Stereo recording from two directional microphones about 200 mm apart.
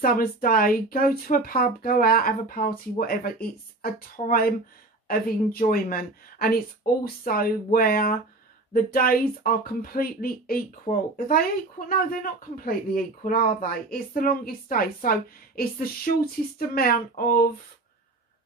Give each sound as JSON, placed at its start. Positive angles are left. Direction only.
{"t": 0.0, "sound": "speech", "side_deg": 45}